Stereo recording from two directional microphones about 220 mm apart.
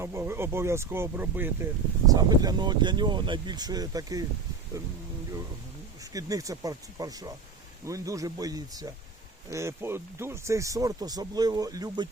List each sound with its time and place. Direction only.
0.0 s speech: 10° right (ahead or behind)
6.0 s speech: 15° right (ahead or behind)